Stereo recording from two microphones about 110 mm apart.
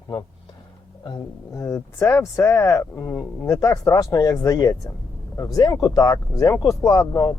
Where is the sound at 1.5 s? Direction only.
25° left (ahead or behind).